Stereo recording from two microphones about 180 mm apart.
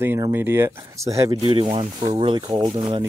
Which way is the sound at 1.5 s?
30° right (ahead or behind).